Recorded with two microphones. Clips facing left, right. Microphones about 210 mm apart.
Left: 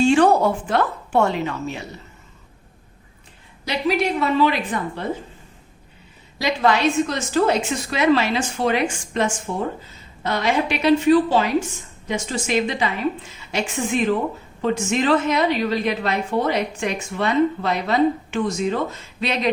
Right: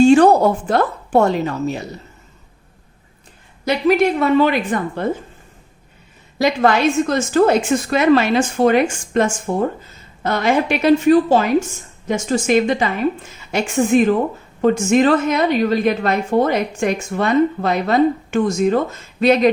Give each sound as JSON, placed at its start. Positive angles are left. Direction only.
{"t": 0.0, "sound": "a woman's voice", "side_deg": -40}
{"t": 3.7, "sound": "a woman's voice", "side_deg": -50}
{"t": 6.4, "sound": "a woman's voice", "side_deg": -50}